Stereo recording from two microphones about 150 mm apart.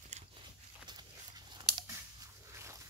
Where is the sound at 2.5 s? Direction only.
20° right (ahead or behind).